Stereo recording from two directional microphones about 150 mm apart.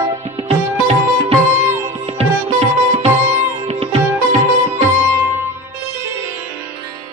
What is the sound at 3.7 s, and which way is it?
Sitar, 40° right (ahead or behind).